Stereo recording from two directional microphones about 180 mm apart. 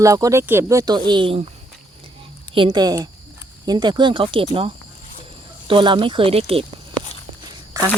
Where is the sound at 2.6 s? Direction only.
25° right (ahead or behind).